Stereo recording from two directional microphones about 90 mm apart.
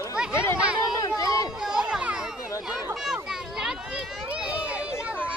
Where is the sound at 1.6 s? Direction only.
10° right (ahead or behind).